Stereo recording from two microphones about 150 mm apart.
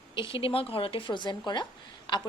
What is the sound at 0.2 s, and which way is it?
A woman's voice, 35° left (ahead or behind).